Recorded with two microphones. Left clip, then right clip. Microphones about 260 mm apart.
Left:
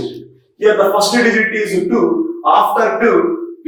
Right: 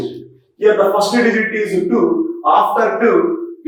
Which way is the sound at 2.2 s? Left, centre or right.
Centre.